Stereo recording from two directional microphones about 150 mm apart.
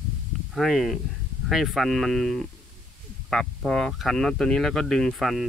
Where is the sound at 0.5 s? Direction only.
Centre (ahead or behind).